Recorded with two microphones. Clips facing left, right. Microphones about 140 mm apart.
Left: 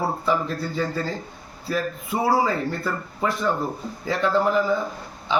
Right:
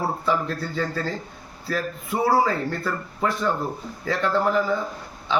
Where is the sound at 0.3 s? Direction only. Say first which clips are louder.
Even; 15° left (ahead or behind).